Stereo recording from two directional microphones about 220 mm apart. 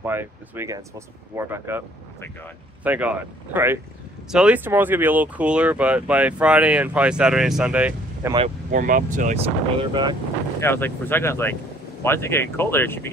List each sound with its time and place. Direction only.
0.0 s speech: 10° right (ahead or behind)
8.7 s speech: 35° right (ahead or behind)
10.6 s speech: 10° left (ahead or behind)